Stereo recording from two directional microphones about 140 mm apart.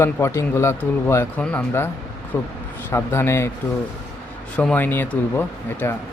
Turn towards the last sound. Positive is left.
turn(degrees=15)  # may be behind; listen again after turning